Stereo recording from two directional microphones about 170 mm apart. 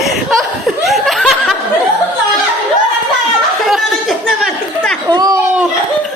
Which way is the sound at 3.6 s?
Centre (ahead or behind).